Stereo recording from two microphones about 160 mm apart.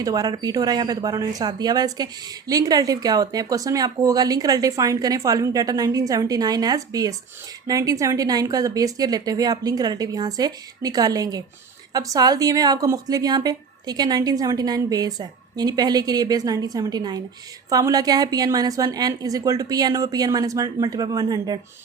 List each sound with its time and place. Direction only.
0.0 s speech: 25° right (ahead or behind)